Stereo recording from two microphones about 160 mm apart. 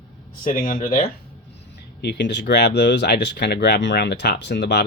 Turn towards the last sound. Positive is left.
turn(degrees=90)